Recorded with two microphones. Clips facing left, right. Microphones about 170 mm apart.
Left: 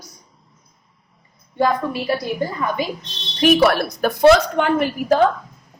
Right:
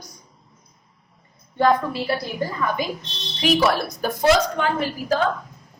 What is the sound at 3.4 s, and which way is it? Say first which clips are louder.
A woman's voice: left 5 dB; 55° left (ahead or behind).